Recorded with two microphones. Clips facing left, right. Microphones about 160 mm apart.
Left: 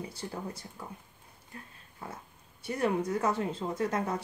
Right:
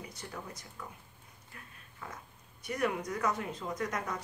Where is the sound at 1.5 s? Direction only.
30° left (ahead or behind).